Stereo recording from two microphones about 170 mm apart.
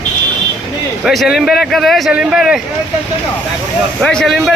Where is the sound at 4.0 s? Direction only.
5° left (ahead or behind).